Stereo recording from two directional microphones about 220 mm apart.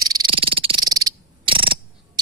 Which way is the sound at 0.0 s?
20° right (ahead or behind).